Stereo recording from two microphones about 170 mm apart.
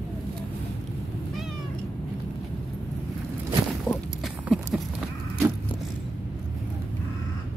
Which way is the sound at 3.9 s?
Centre (ahead or behind).